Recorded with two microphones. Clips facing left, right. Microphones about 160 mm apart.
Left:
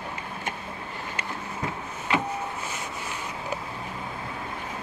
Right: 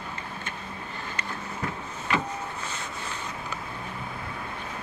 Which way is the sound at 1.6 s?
20° left (ahead or behind).